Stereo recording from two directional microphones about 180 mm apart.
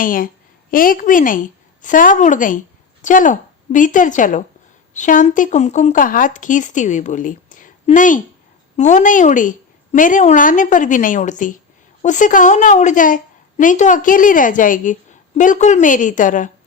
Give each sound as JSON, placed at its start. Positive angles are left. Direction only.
{"t": 0.0, "sound": "a woman's voice", "side_deg": 50}